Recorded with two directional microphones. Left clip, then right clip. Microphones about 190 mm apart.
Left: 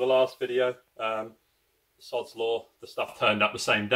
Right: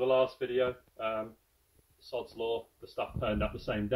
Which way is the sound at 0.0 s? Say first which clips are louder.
Left 4 dB; 10° left (ahead or behind).